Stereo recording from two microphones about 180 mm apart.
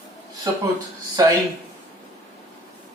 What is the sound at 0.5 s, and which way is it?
Speech, 25° right (ahead or behind).